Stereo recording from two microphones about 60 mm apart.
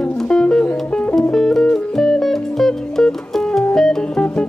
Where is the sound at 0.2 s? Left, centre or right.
Centre.